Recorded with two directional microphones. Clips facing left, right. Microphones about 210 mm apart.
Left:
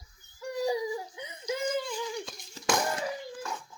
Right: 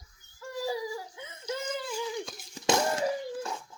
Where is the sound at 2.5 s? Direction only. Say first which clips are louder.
Right 2 dB; 25° right (ahead or behind).